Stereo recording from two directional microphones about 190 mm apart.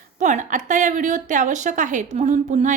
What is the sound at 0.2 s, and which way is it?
A woman's voice, 40° right (ahead or behind).